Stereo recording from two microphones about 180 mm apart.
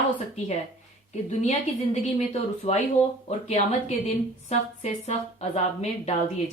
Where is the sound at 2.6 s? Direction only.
35° left (ahead or behind).